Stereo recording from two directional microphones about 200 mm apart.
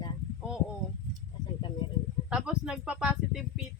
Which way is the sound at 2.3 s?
5° right (ahead or behind).